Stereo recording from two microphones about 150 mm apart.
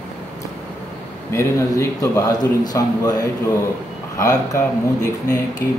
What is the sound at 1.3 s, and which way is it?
A man's voice, 20° left (ahead or behind).